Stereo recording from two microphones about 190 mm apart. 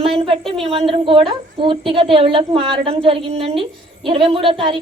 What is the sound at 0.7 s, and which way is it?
A woman's voice, 30° right (ahead or behind).